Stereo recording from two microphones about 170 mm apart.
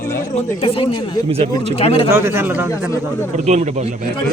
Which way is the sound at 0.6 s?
35° left (ahead or behind).